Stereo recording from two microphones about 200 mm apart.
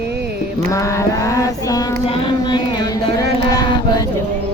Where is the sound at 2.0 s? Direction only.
25° left (ahead or behind).